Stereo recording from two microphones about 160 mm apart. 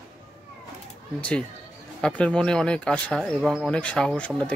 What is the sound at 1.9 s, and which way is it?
Speech, 5° left (ahead or behind).